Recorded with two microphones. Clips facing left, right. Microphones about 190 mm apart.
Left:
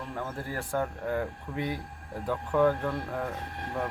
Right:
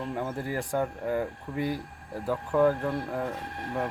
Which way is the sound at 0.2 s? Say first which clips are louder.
Right 1 dB; 15° right (ahead or behind).